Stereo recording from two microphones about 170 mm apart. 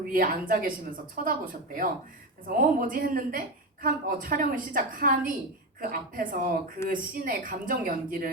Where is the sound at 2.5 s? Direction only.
55° right (ahead or behind).